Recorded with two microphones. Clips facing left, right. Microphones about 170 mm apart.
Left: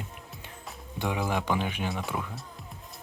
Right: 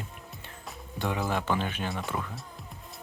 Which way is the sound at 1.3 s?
15° left (ahead or behind).